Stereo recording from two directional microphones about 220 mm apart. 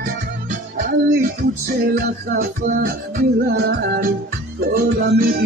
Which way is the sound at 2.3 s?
40° right (ahead or behind).